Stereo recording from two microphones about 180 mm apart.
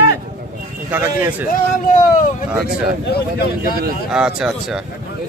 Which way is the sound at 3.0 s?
65° left (ahead or behind).